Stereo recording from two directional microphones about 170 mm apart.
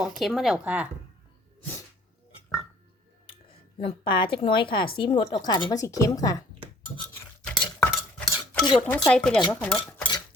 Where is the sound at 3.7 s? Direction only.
30° left (ahead or behind).